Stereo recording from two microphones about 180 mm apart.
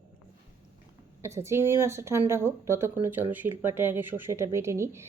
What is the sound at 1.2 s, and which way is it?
Speech, 15° right (ahead or behind).